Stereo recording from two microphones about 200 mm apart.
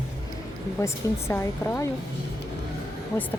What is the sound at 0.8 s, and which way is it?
A woman's voice, 15° left (ahead or behind).